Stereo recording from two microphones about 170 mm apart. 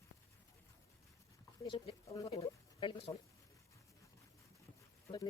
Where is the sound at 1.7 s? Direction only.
30° left (ahead or behind).